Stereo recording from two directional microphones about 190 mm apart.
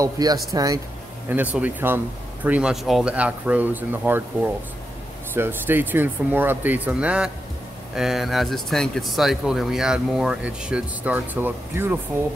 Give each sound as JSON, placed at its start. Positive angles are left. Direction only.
{"t": 0.0, "sound": "speech", "side_deg": -20}
{"t": 5.3, "sound": "speech", "side_deg": -10}